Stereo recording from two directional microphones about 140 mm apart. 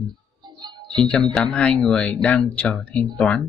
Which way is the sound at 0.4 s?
30° right (ahead or behind).